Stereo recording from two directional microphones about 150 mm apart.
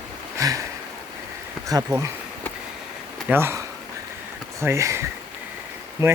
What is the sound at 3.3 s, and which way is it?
Speech, 15° right (ahead or behind).